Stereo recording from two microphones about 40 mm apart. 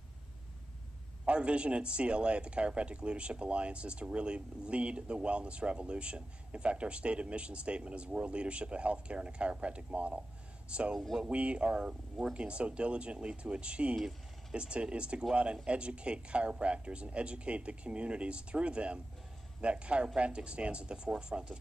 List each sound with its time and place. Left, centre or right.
1.2 s a man's voice: right